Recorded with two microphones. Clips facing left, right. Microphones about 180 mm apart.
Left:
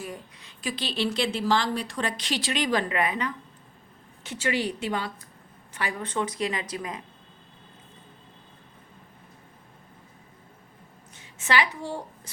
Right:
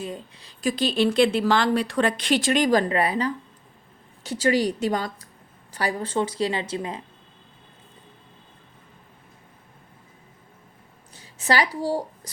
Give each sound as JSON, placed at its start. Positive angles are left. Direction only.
{"t": 0.0, "sound": "speech", "side_deg": -25}
{"t": 0.4, "sound": "a woman's voice", "side_deg": -45}
{"t": 11.1, "sound": "a woman's voice", "side_deg": -35}